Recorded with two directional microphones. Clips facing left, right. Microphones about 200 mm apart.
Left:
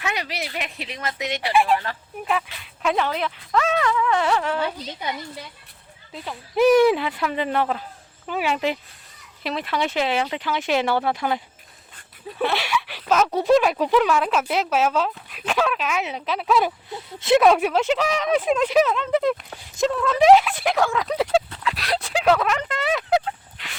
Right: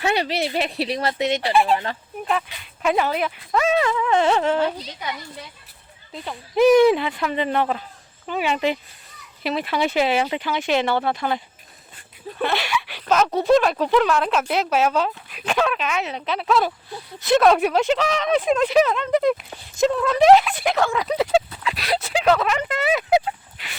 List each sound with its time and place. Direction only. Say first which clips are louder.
0.0 s speech: right 7 dB; 30° right (ahead or behind)
2.8 s speech: right 2 dB; 5° right (ahead or behind); by 4.6 s 25° right (ahead or behind)
6.1 s speech: right 2 dB; 5° left (ahead or behind)
12.4 s speech: even; 5° left (ahead or behind)
17.4 s speech: right 1 dB; 5° left (ahead or behind)